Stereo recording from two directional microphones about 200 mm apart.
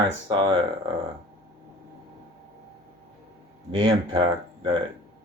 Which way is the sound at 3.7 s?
70° right (ahead or behind).